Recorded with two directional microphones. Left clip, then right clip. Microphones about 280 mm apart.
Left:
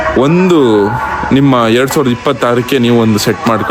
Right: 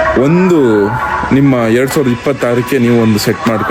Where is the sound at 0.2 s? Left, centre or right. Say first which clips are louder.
Left 1 dB; centre.